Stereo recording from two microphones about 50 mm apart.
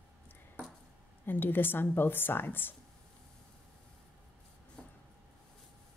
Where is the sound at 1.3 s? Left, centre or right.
Left.